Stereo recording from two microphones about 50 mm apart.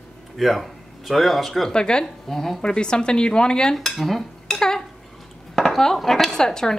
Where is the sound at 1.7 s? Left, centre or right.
Centre.